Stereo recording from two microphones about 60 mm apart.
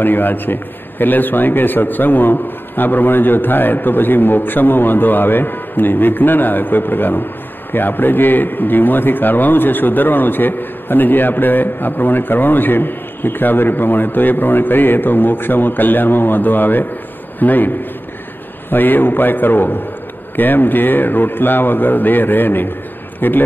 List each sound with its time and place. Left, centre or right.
0.0 s a man's voice: left